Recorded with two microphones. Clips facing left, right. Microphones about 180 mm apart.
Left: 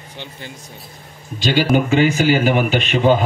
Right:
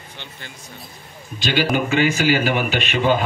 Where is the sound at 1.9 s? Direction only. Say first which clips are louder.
Left 3 dB; 25° left (ahead or behind).